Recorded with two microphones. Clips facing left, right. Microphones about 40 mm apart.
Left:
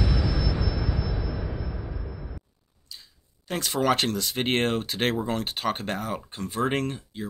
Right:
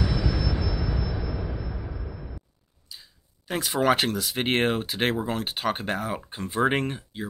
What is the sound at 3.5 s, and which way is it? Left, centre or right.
Speech, centre.